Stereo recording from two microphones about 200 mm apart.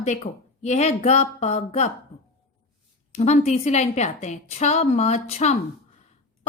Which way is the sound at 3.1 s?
35° left (ahead or behind).